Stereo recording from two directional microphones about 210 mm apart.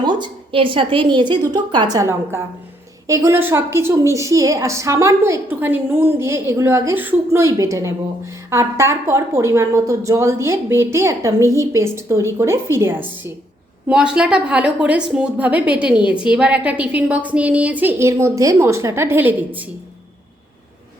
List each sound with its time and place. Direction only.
0.0 s a woman's voice: 20° right (ahead or behind)